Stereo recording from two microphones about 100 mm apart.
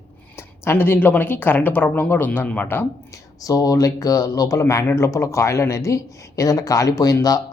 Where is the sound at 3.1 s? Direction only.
35° left (ahead or behind).